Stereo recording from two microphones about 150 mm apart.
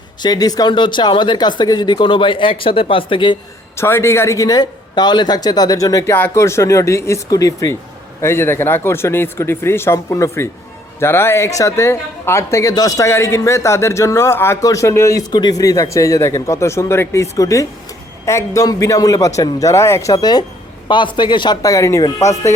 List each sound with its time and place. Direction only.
0.2 s speech: 25° left (ahead or behind)
3.8 s speech: 15° left (ahead or behind)